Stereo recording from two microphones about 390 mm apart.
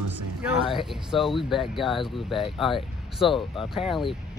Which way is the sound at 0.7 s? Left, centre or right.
Centre.